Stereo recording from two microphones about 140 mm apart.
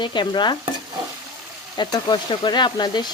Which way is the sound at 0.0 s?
35° left (ahead or behind).